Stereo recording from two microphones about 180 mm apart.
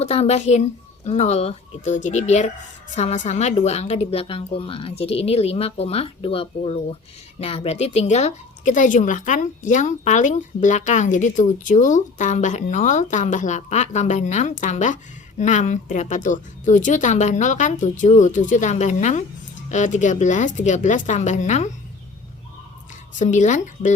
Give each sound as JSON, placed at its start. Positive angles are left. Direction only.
{"t": 0.0, "sound": "a woman's voice", "side_deg": 35}
{"t": 23.1, "sound": "a woman's voice", "side_deg": 40}